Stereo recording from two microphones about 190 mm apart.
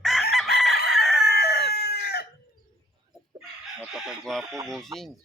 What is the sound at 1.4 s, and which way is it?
Chicken, 60° left (ahead or behind).